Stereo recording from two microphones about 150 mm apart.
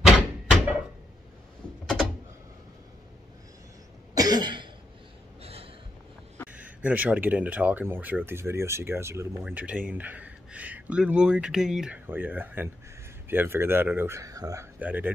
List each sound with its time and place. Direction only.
0.0 s door: 5° right (ahead or behind)
4.1 s cough: 25° right (ahead or behind)
5.4 s a sound: 40° right (ahead or behind)
6.5 s speech: 10° right (ahead or behind)
14.8 s speech: 10° right (ahead or behind)